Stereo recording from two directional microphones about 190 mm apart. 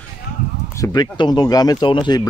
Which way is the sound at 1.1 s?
20° left (ahead or behind).